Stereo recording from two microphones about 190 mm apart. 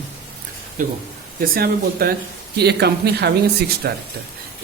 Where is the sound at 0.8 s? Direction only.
45° right (ahead or behind).